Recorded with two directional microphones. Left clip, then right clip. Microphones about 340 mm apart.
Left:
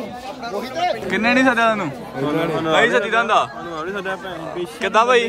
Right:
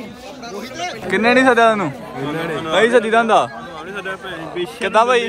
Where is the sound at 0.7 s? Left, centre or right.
Centre.